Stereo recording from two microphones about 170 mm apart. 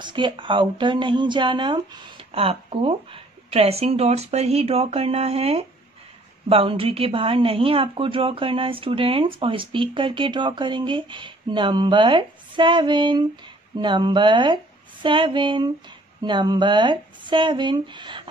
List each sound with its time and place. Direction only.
0.0 s speech: 30° right (ahead or behind)